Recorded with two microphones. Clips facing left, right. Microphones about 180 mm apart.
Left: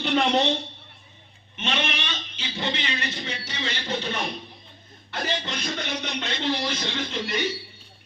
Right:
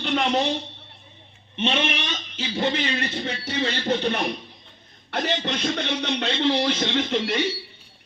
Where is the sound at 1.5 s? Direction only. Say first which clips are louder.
Right 5 dB; 30° right (ahead or behind).